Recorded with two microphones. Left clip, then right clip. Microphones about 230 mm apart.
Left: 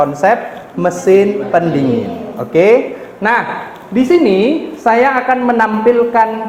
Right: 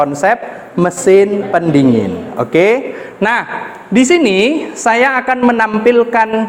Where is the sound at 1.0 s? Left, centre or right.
Right.